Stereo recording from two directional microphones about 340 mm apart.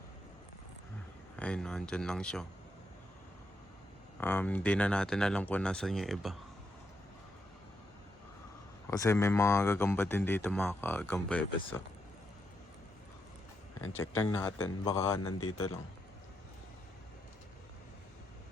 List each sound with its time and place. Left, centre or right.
1.4 s speech: centre
4.2 s speech: centre
8.9 s speech: centre
13.8 s speech: centre
15.3 s speech: left